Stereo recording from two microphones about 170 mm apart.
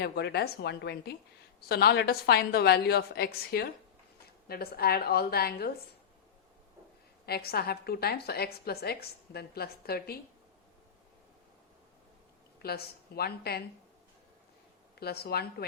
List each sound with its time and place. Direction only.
0.0 s a woman's voice: 75° left (ahead or behind)
7.3 s a woman's voice: 65° left (ahead or behind)
12.6 s a woman's voice: 65° left (ahead or behind)
14.9 s a woman's voice: 70° left (ahead or behind)